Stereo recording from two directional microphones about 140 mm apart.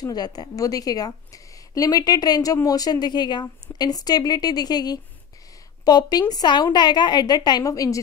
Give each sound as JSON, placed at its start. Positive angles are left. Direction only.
{"t": 0.0, "sound": "a woman's voice", "side_deg": 30}